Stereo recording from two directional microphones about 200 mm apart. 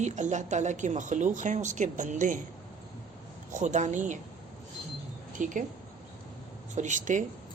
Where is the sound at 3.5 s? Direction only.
35° right (ahead or behind).